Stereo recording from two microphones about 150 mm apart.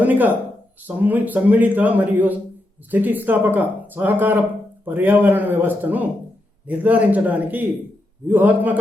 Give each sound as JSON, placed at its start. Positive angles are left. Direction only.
{"t": 0.0, "sound": "a man's voice", "side_deg": -10}